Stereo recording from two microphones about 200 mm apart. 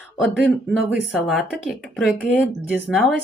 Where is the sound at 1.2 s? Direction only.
Centre (ahead or behind).